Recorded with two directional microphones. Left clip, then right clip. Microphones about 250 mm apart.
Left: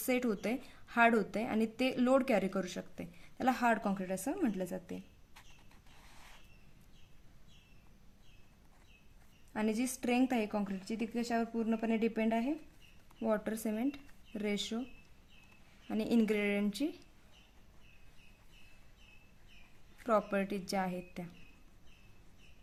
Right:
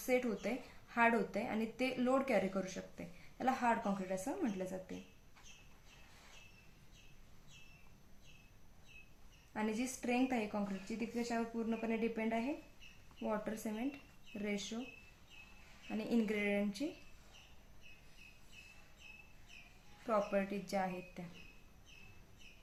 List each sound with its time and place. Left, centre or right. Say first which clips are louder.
0.0 s speech: left 2 dB; left
9.5 s a woman's voice: left 4 dB; left
15.9 s speech: left 5 dB; left
20.1 s speech: left 4 dB; left